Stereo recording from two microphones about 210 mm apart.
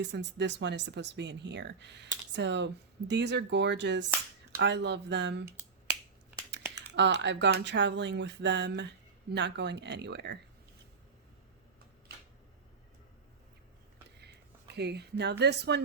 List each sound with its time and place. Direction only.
0.0 s speech: 55° right (ahead or behind)
6.5 s speech: 55° right (ahead or behind)
14.8 s a woman's voice: 55° right (ahead or behind)